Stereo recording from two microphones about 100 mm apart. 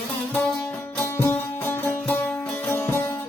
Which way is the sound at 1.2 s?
20° left (ahead or behind).